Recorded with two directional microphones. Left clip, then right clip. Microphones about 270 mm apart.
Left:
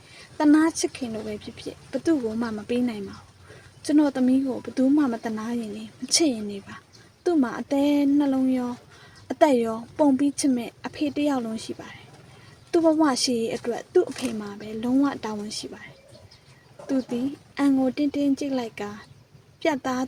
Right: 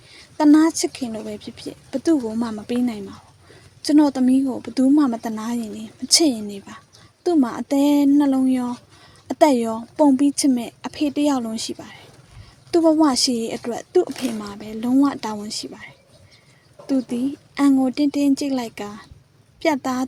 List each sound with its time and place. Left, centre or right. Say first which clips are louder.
0.3 s a woman's voice: right 5 dB; right